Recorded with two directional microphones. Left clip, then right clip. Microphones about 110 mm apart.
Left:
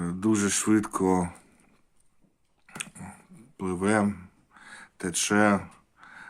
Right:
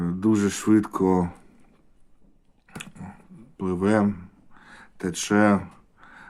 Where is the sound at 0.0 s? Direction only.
20° left (ahead or behind).